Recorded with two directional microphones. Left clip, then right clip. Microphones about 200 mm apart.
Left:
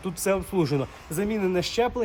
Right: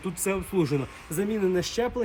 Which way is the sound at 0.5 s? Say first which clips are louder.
Left 1 dB; 15° left (ahead or behind).